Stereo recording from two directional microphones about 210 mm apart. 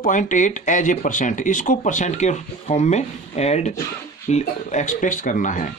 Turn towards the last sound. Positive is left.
turn(degrees=40)  # may be behind; listen again after turning